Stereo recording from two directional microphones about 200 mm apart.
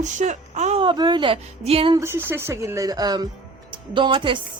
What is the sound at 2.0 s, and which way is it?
Speech, 10° right (ahead or behind).